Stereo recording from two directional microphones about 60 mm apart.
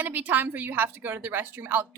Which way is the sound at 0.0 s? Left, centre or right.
Right.